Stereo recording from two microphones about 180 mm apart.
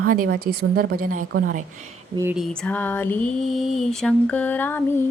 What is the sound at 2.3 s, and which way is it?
Mantra, 5° left (ahead or behind).